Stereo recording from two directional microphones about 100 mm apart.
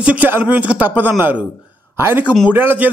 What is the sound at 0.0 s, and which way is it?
A man's voice, 15° right (ahead or behind).